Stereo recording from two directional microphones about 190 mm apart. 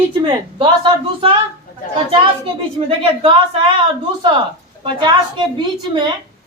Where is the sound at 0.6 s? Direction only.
25° right (ahead or behind).